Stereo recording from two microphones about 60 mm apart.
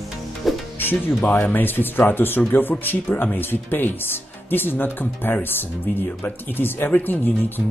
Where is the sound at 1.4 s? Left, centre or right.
Left.